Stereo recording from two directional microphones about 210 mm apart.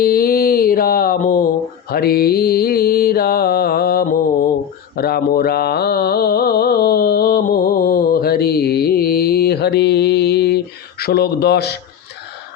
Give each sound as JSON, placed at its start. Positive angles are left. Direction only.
{"t": 0.0, "sound": "mantra", "side_deg": 45}